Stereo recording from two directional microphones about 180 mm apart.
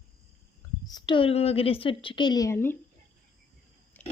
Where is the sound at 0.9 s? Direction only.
25° left (ahead or behind).